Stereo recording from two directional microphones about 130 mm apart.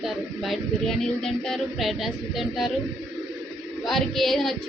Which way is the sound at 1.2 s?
5° left (ahead or behind).